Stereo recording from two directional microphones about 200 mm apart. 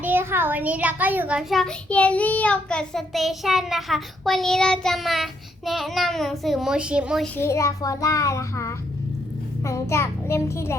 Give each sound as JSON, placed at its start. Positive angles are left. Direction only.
{"t": 0.0, "sound": "a child's voice", "side_deg": -10}
{"t": 7.3, "sound": "a child's voice", "side_deg": 15}